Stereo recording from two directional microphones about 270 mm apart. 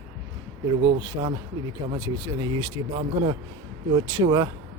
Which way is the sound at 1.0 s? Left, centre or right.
Centre.